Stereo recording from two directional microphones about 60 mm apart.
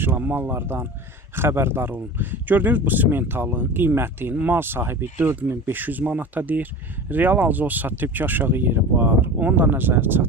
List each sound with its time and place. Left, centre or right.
0.0 s speech: right